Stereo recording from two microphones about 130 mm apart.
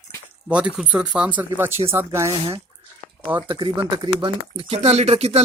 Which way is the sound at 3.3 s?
40° right (ahead or behind).